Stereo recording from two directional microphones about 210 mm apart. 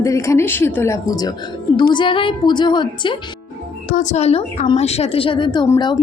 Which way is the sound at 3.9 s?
35° left (ahead or behind).